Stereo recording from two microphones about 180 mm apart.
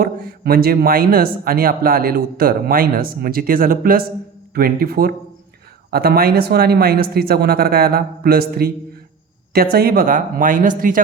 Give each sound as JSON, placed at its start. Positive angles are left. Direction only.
{"t": 0.0, "sound": "speech", "side_deg": -55}